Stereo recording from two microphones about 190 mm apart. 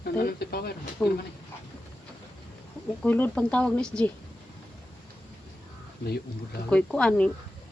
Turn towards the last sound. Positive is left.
turn(degrees=5)  # may be behind; listen again after turning